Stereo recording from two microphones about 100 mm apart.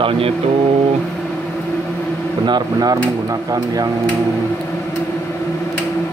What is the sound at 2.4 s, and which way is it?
Speech, 45° right (ahead or behind).